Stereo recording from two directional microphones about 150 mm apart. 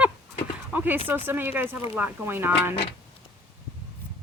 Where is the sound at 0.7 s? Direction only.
10° right (ahead or behind).